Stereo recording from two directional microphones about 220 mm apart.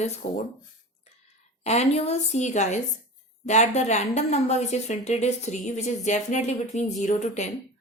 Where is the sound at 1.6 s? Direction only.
30° left (ahead or behind).